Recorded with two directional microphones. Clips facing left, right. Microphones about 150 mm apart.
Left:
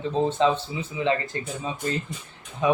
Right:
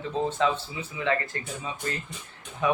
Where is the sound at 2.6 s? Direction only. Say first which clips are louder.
Left 3 dB; 20° left (ahead or behind).